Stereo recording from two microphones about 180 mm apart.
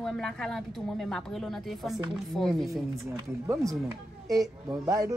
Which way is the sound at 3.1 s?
20° right (ahead or behind).